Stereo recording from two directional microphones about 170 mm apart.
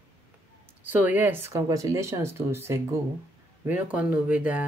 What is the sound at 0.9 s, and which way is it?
Speech, 10° right (ahead or behind).